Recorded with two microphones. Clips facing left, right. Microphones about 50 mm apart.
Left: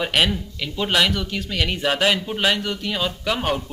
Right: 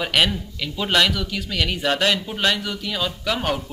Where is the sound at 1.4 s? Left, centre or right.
Centre.